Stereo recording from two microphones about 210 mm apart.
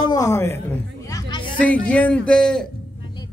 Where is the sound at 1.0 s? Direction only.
15° left (ahead or behind).